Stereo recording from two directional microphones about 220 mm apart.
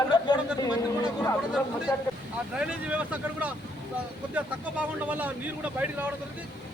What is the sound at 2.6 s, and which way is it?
A man's voice, 5° right (ahead or behind).